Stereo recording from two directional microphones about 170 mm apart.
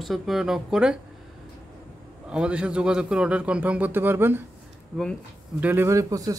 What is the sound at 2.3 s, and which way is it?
A man's voice, 5° right (ahead or behind).